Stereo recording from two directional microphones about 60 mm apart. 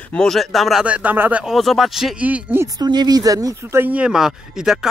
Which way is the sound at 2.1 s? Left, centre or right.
Right.